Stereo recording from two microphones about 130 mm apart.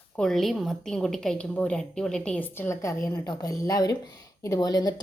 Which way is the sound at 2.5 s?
20° left (ahead or behind).